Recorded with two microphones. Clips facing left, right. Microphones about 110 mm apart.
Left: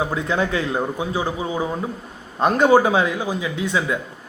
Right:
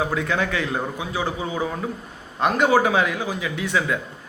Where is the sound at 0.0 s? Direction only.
25° left (ahead or behind).